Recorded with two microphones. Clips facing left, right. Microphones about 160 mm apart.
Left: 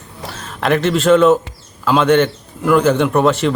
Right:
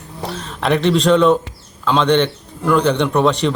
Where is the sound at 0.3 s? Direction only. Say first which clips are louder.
Left 1 dB; centre (ahead or behind).